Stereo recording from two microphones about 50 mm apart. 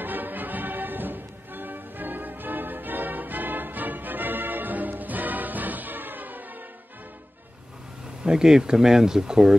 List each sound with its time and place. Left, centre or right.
0.0 s music: right
8.2 s speech: centre